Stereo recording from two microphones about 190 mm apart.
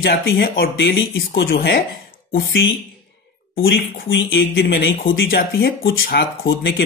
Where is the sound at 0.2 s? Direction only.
65° left (ahead or behind).